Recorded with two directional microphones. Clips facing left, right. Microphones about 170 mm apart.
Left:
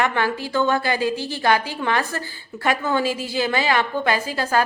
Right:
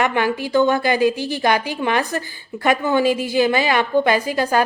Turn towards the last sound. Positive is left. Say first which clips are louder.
# right 3 dB
turn(degrees=-15)  # may be behind; listen again after turning